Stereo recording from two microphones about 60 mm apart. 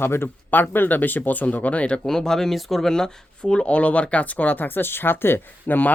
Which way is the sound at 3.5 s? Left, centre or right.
Centre.